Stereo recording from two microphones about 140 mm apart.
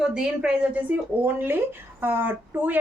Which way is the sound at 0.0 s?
5° right (ahead or behind).